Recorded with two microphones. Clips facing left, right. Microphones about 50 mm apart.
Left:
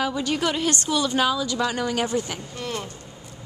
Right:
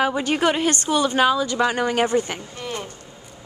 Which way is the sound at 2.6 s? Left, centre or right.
Centre.